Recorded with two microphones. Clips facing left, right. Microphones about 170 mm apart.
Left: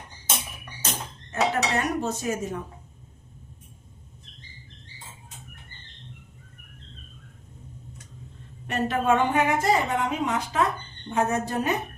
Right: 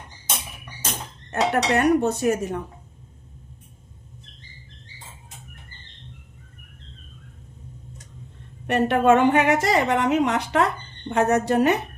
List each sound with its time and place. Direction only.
1.3 s speech: 65° right (ahead or behind)
8.6 s a woman's voice: 65° right (ahead or behind)